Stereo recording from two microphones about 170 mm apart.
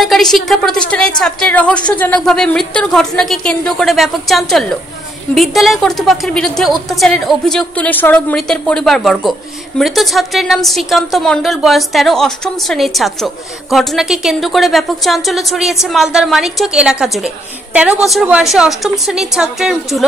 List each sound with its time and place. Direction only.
0.0 s a woman's voice: centre (ahead or behind)